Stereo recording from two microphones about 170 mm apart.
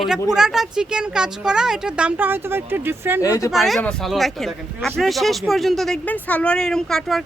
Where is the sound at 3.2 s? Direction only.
20° left (ahead or behind).